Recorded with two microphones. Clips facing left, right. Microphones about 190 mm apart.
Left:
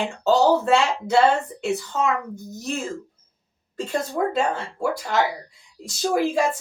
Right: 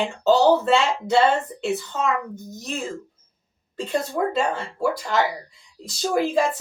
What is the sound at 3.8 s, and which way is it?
Speech, centre (ahead or behind).